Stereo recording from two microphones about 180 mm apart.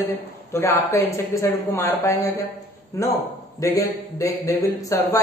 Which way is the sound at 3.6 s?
20° left (ahead or behind).